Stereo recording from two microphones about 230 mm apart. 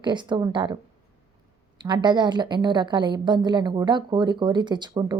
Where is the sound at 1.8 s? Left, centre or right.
Centre.